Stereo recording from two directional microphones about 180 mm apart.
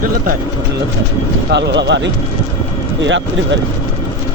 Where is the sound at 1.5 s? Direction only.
70° right (ahead or behind).